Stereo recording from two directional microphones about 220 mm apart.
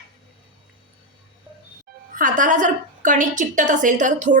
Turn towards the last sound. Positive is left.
turn(degrees=-35)  # may be behind; listen again after turning